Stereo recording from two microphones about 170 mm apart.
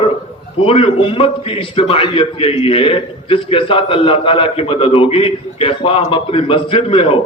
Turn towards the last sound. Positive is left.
turn(degrees=35)  # may be behind; listen again after turning